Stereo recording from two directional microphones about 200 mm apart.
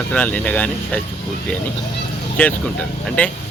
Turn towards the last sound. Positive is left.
turn(degrees=5)  # may be behind; listen again after turning